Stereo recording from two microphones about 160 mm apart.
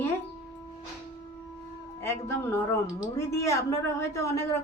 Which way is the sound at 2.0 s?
15° left (ahead or behind).